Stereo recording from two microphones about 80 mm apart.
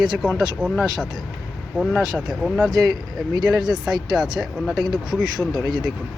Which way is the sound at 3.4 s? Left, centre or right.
Right.